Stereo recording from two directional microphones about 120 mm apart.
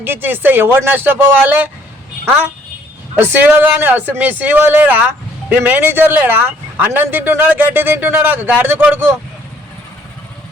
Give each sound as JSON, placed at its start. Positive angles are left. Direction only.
{"t": 0.0, "sound": "speech", "side_deg": -15}
{"t": 3.2, "sound": "speech", "side_deg": -15}